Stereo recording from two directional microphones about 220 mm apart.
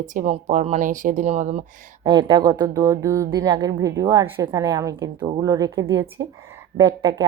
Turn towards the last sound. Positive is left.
turn(degrees=-15)  # may be behind; listen again after turning